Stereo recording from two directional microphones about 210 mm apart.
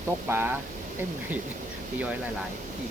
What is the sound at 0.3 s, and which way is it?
Speech, 10° right (ahead or behind).